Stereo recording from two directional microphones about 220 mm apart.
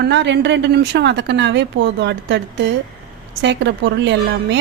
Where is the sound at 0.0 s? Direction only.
50° right (ahead or behind).